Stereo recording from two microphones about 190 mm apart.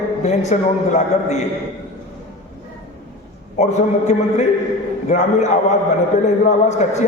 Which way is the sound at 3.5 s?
40° left (ahead or behind).